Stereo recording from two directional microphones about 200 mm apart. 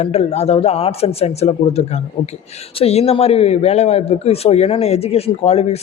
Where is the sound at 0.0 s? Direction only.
30° left (ahead or behind).